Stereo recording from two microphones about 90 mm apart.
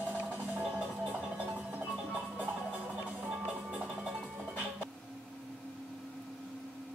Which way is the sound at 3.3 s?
10° right (ahead or behind).